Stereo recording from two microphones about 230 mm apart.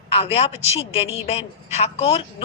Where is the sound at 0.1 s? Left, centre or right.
Left.